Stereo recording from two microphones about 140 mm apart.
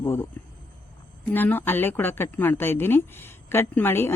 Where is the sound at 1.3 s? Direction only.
15° left (ahead or behind).